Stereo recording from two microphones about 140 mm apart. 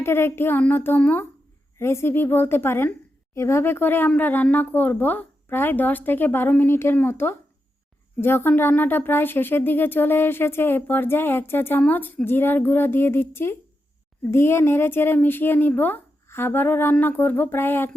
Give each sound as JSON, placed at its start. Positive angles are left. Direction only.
{"t": 0.0, "sound": "speech", "side_deg": 15}